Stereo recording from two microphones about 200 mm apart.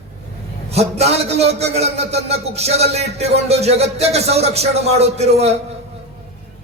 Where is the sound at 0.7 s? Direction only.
30° right (ahead or behind).